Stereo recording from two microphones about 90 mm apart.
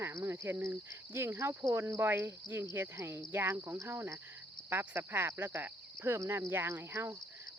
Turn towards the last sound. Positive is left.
turn(degrees=-30)  # may be behind; listen again after turning